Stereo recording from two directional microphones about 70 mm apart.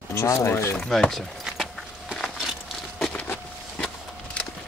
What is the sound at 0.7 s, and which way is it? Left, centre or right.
Speech, centre.